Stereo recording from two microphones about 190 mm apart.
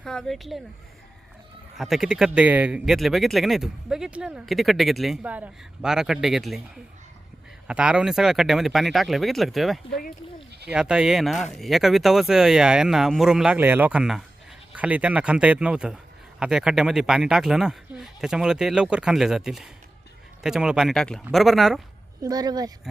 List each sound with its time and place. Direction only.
0.0 s speech: 5° left (ahead or behind)
1.8 s speech: centre (ahead or behind)
7.7 s speech: 5° right (ahead or behind)
22.2 s speech: 20° right (ahead or behind)